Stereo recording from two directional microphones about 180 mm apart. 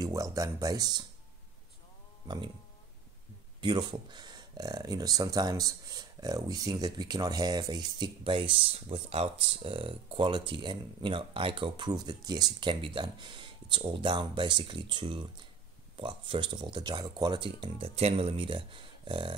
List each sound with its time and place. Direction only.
0.0 s speech: 20° right (ahead or behind)
2.2 s speech: 25° right (ahead or behind)
3.6 s speech: 25° right (ahead or behind)